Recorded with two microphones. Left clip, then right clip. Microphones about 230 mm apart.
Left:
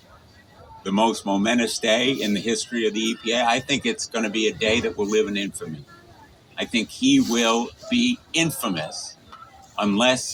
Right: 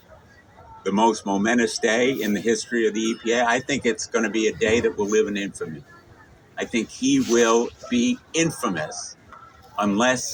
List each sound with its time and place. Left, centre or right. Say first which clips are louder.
0.8 s speech: right 1 dB; left
6.6 s speech: left 1 dB; left